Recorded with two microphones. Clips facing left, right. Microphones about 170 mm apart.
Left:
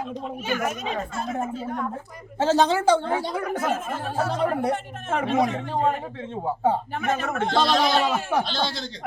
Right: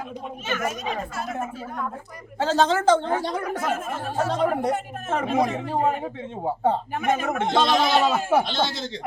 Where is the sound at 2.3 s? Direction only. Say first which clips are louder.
Left 1 dB; 15° left (ahead or behind).